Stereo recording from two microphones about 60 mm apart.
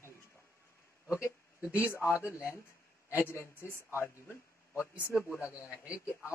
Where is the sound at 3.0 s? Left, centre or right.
Left.